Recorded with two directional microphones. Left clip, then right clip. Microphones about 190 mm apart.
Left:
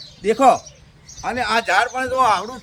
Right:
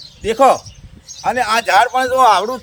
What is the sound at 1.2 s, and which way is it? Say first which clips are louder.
Speech: right 4 dB; 20° right (ahead or behind).